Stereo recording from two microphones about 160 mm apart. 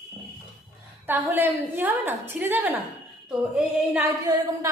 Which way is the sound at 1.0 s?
10° right (ahead or behind).